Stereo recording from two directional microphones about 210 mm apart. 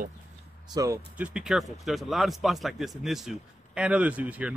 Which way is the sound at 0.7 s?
15° right (ahead or behind).